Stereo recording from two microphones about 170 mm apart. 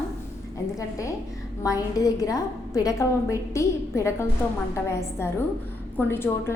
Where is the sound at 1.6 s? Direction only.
20° left (ahead or behind).